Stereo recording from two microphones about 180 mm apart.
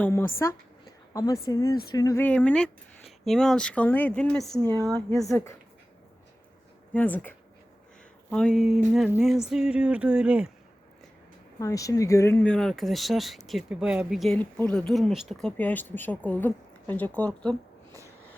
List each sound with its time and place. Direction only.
0.0 s speech: 15° left (ahead or behind)
2.2 s speech: 10° left (ahead or behind)
6.9 s speech: 10° left (ahead or behind)
11.6 s speech: 20° left (ahead or behind)